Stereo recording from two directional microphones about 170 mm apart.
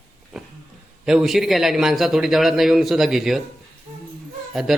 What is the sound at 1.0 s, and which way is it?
A man's voice, 5° right (ahead or behind).